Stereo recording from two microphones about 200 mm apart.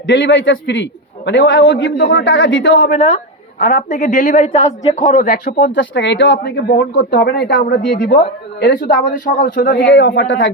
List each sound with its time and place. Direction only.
0.1 s speech: 65° left (ahead or behind)
3.6 s a woman's voice: 40° left (ahead or behind); by 8.2 s 60° left (ahead or behind)
8.6 s a man's voice: 40° left (ahead or behind)
9.8 s speech: 60° left (ahead or behind)